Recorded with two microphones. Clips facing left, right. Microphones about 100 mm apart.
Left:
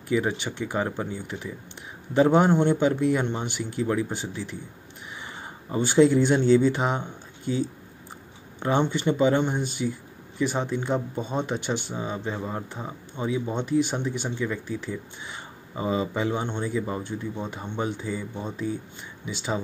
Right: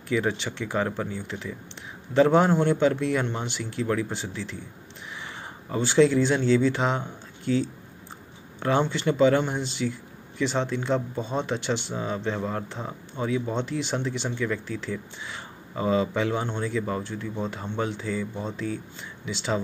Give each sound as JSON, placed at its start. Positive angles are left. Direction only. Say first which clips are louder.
{"t": 0.1, "sound": "speech", "louder": "left 1 dB", "side_deg": 10}
{"t": 5.7, "sound": "speech", "louder": "left 1 dB", "side_deg": 15}